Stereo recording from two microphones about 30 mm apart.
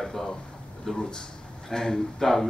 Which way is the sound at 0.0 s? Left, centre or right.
Centre.